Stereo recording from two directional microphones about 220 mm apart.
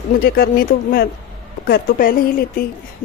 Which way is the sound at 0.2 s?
45° left (ahead or behind).